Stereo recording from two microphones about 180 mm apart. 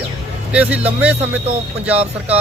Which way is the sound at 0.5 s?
5° right (ahead or behind).